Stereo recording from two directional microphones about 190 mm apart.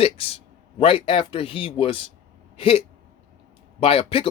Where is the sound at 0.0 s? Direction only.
30° left (ahead or behind).